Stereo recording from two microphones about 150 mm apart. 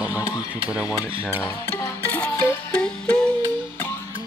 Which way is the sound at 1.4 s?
15° left (ahead or behind).